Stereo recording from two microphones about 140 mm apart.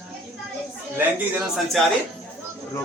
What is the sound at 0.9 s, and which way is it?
Speech, 5° right (ahead or behind).